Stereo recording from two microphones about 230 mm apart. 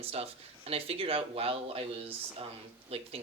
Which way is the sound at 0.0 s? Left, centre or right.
Right.